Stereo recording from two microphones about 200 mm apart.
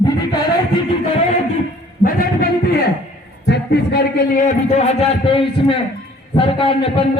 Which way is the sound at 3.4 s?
55° left (ahead or behind).